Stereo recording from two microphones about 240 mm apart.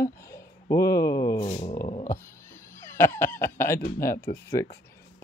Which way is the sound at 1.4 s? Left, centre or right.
Left.